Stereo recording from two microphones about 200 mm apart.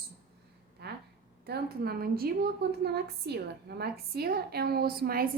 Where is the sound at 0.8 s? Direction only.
55° right (ahead or behind).